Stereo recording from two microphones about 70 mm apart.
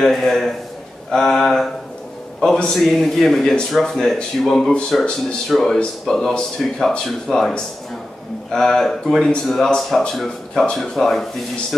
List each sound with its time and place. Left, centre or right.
0.0 s a man's voice: centre